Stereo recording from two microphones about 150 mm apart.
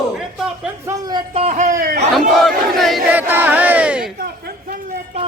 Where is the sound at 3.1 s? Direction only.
10° right (ahead or behind).